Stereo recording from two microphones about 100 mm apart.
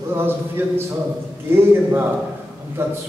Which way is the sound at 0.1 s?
20° right (ahead or behind).